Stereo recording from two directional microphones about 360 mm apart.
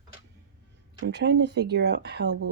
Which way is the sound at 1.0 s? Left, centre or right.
Right.